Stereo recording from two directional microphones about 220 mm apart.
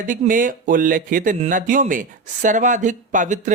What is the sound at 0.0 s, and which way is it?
Speech, 35° right (ahead or behind).